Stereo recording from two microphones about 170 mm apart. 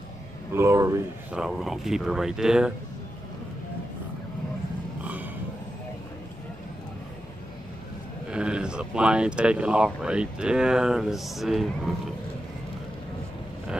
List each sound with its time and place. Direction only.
0.5 s speech: 15° right (ahead or behind)
1.3 s speech: centre (ahead or behind)
5.0 s a sound: 10° right (ahead or behind)
8.3 s speech: 5° right (ahead or behind)